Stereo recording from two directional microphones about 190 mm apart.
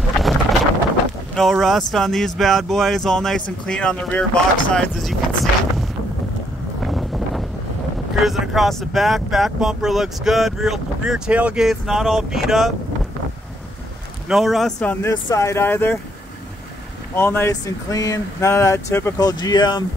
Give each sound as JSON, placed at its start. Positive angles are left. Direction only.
{"t": 1.3, "sound": "speech", "side_deg": 0}
{"t": 6.8, "sound": "wind noise", "side_deg": 0}
{"t": 8.2, "sound": "speech", "side_deg": 0}
{"t": 14.3, "sound": "speech", "side_deg": 0}
{"t": 17.1, "sound": "speech", "side_deg": 10}